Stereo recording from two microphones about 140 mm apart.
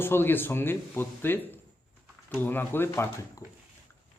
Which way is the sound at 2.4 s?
15° left (ahead or behind).